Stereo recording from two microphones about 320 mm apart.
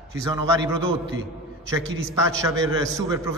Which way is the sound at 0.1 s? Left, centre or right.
Centre.